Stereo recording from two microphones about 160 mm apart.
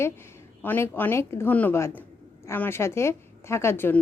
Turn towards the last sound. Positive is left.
turn(degrees=15)  # may be behind; listen again after turning